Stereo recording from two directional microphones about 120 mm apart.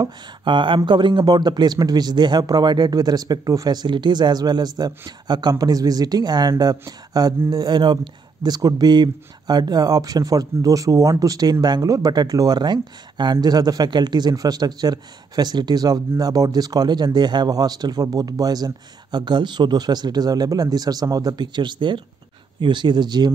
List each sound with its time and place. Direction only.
0.0 s speech: 40° right (ahead or behind)